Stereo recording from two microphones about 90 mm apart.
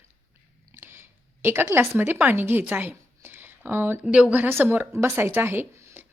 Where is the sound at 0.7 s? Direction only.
25° right (ahead or behind).